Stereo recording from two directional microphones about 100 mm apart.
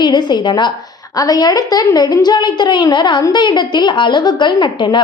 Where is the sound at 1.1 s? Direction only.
40° left (ahead or behind).